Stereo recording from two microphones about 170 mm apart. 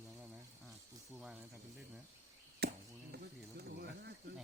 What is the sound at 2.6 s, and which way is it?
Chop, 70° right (ahead or behind).